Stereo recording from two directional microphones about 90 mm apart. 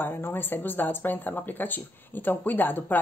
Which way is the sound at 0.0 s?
25° left (ahead or behind).